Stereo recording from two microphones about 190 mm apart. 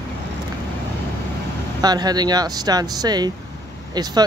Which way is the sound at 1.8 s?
20° right (ahead or behind).